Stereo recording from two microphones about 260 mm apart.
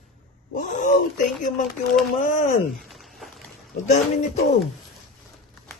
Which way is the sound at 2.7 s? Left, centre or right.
Centre.